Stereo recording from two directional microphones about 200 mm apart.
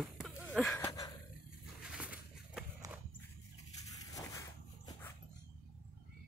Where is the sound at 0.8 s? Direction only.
15° left (ahead or behind).